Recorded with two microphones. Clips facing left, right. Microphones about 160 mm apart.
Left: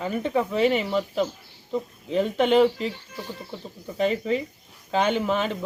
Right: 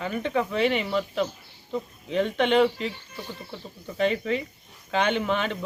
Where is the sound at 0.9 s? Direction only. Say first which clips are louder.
Left 2 dB; centre (ahead or behind).